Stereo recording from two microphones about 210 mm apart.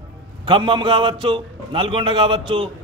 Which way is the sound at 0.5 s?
25° right (ahead or behind).